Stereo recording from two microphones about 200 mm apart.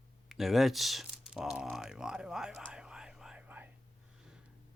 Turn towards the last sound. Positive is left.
turn(degrees=-5)  # may be behind; listen again after turning